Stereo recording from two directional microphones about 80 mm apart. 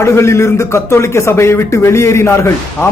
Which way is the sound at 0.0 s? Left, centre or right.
Left.